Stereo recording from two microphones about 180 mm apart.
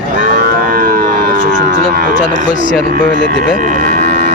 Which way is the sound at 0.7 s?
50° right (ahead or behind).